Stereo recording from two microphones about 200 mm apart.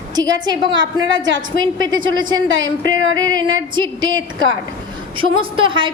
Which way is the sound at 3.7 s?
20° right (ahead or behind).